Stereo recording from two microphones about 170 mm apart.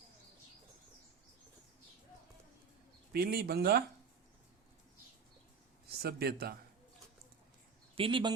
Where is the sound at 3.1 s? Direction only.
65° right (ahead or behind).